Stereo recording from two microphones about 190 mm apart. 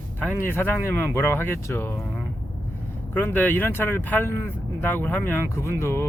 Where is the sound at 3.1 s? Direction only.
10° left (ahead or behind).